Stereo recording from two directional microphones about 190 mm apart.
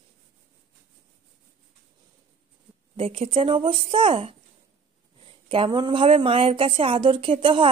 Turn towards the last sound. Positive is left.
turn(degrees=-25)  # may be behind; listen again after turning